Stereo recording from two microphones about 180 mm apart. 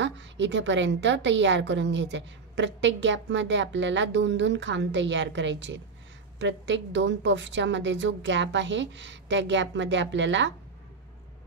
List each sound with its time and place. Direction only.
0.0 s a woman's voice: 90° right